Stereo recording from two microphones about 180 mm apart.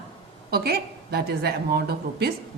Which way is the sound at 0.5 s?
60° right (ahead or behind).